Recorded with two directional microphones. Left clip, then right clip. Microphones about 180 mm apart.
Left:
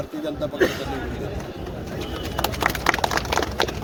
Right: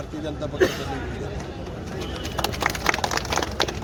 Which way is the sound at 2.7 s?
40° left (ahead or behind).